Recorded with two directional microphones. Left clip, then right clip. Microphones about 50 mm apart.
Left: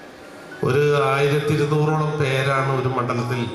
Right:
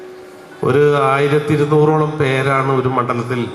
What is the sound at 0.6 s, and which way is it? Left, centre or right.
A man's voice, right.